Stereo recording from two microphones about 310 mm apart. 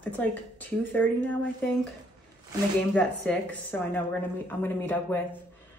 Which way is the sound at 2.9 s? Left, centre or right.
Centre.